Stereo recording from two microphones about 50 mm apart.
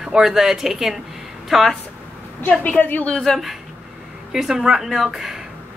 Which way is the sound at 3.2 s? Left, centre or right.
Centre.